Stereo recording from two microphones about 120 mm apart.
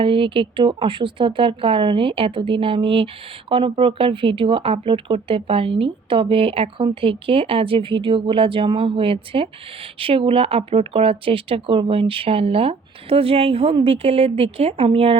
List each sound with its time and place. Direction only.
0.0 s speech: 45° right (ahead or behind)